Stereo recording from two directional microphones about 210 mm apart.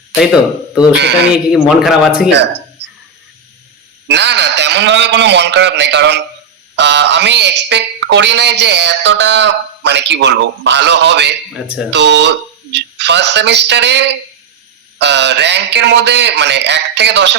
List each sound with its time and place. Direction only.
0.2 s a man's voice: 5° right (ahead or behind)
2.3 s a sound: 55° right (ahead or behind)
4.1 s speech: 55° right (ahead or behind)
11.5 s a man's voice: 5° right (ahead or behind)
11.9 s speech: 55° right (ahead or behind)